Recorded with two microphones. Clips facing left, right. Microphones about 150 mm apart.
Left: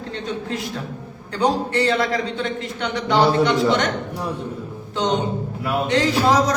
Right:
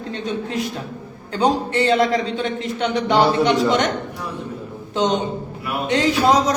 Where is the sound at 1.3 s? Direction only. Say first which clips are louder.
Right 1 dB; 20° right (ahead or behind).